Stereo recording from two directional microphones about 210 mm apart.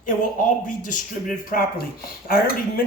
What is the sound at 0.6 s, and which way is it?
Speech, 40° left (ahead or behind).